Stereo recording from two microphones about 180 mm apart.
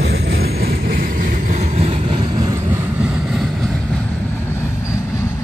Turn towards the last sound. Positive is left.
turn(degrees=0)  # may be behind; listen again after turning